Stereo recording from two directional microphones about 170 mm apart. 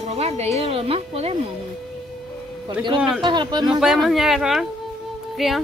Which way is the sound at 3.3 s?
25° right (ahead or behind).